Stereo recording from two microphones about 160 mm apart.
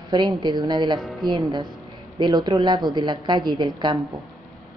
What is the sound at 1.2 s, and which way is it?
A woman's voice, 25° right (ahead or behind).